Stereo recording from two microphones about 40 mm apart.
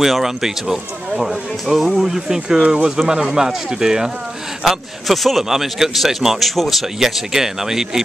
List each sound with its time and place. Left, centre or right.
0.0 s speech: centre
5.0 s a man's voice: centre
6.5 s a man's voice: centre
7.0 s speech: centre